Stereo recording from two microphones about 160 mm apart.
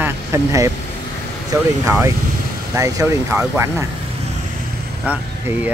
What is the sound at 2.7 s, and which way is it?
Speech, 20° right (ahead or behind).